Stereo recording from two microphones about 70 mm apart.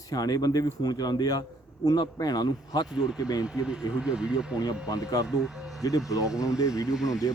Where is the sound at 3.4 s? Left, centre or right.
Centre.